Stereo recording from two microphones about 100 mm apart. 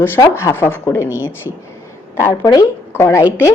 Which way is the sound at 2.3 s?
35° left (ahead or behind).